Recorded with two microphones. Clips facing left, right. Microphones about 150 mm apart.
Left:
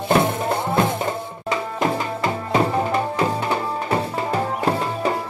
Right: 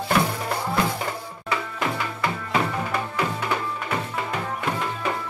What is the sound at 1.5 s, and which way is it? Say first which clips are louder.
Music: left 5 dB; 35° left (ahead or behind).